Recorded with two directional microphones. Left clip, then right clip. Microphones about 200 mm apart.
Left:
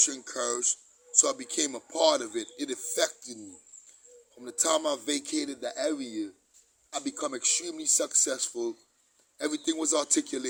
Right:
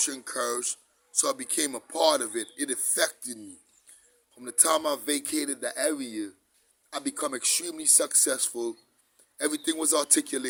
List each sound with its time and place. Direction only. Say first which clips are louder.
0.0 s speech: left 1 dB; 15° right (ahead or behind)
4.4 s speech: right 2 dB; 15° right (ahead or behind)